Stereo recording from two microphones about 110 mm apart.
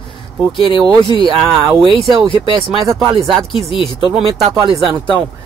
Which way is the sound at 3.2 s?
Centre (ahead or behind).